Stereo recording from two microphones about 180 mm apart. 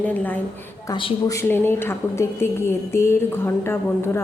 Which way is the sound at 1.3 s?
10° left (ahead or behind).